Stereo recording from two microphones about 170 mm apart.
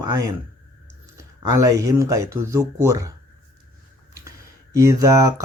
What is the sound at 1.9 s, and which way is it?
Speech, 20° right (ahead or behind).